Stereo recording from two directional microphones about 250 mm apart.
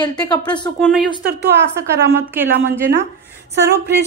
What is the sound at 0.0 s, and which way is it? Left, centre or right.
Speech, centre.